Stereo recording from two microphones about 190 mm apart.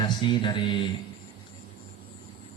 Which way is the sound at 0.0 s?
25° left (ahead or behind).